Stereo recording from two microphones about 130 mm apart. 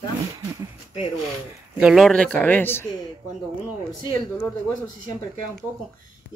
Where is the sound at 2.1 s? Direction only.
10° left (ahead or behind).